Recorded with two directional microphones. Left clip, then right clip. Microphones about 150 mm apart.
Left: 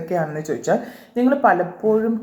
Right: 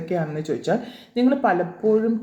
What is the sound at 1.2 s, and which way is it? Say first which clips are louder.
Speech: left 4 dB; 5° right (ahead or behind).